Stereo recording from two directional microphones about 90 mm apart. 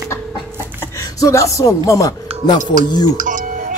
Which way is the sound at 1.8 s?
40° left (ahead or behind).